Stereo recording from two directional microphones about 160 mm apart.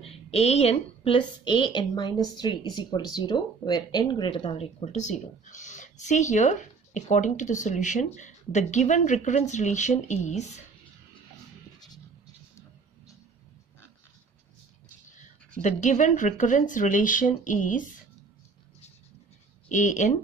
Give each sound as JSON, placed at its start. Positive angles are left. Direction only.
{"t": 0.0, "sound": "a woman's voice", "side_deg": 40}
{"t": 15.6, "sound": "speech", "side_deg": 50}
{"t": 19.7, "sound": "speech", "side_deg": 50}